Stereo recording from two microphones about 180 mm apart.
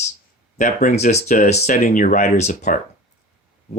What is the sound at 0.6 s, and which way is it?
Speech, 45° left (ahead or behind).